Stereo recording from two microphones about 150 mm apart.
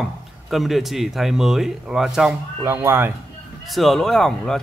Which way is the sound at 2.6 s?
15° right (ahead or behind).